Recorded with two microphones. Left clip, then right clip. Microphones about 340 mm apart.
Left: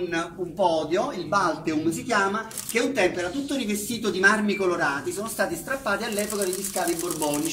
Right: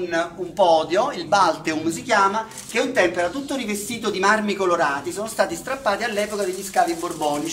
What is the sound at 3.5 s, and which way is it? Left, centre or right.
Speech, centre.